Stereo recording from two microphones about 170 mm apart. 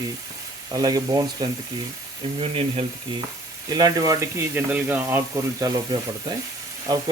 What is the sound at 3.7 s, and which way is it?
Speech, 20° right (ahead or behind).